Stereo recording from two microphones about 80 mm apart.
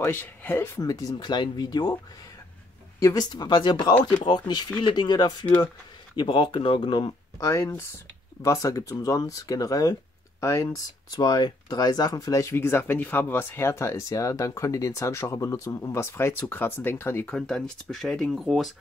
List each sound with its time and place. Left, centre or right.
0.0 s speech: left
0.7 s speech: left
1.2 s speech: left
3.0 s speech: left
3.3 s speech: left
6.1 s speech: left
7.3 s speech: left
11.1 s speech: left
17.3 s speech: centre